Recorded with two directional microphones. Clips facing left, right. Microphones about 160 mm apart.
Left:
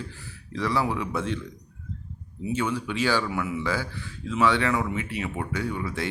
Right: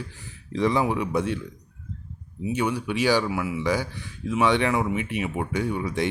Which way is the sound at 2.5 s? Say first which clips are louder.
Right 2 dB; 15° right (ahead or behind).